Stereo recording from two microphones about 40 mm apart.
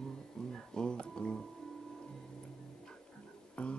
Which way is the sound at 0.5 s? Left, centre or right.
Centre.